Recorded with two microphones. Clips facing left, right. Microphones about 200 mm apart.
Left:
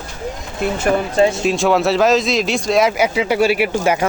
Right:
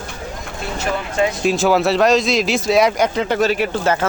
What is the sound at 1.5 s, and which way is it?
Speech, centre (ahead or behind).